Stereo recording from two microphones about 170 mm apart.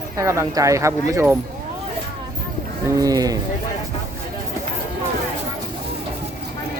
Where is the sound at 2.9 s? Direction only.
20° right (ahead or behind).